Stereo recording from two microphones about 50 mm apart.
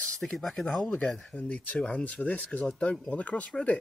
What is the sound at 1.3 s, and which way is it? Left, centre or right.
Speech, left.